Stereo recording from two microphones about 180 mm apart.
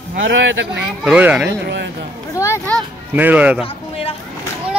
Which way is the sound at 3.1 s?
10° right (ahead or behind).